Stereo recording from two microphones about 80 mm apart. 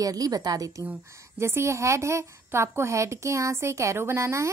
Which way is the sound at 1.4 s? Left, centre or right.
Right.